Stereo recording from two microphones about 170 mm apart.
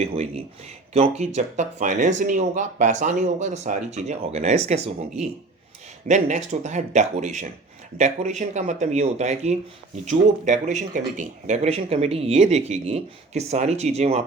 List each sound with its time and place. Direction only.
0.0 s speech: 40° right (ahead or behind)